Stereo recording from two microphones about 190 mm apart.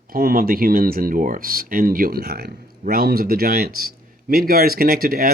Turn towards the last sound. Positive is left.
turn(degrees=-50)  # may be behind; listen again after turning